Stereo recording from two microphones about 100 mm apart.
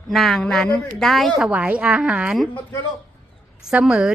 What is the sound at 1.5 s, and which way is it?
Speech, 10° right (ahead or behind).